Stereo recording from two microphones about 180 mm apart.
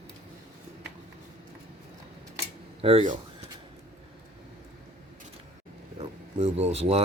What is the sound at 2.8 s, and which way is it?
Speech, 40° right (ahead or behind).